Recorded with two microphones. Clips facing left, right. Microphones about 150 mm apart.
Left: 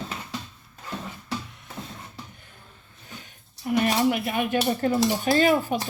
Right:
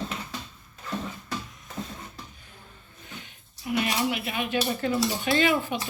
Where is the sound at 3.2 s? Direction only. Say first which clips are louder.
Left 5 dB; 45° left (ahead or behind).